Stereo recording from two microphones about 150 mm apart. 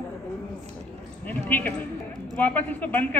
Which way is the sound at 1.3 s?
10° left (ahead or behind).